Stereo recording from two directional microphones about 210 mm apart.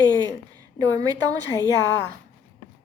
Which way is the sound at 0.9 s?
15° right (ahead or behind).